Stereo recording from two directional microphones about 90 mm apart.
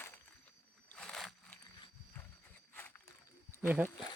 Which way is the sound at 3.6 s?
15° right (ahead or behind).